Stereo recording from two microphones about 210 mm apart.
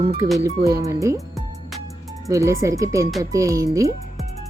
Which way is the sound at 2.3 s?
15° right (ahead or behind).